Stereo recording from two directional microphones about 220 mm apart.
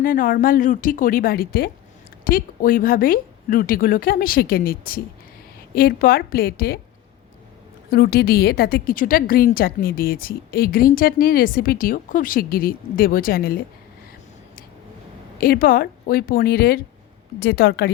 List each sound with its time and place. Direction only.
0.0 s a woman's voice: 40° left (ahead or behind)
7.9 s a woman's voice: 45° left (ahead or behind)
15.4 s a woman's voice: 40° left (ahead or behind)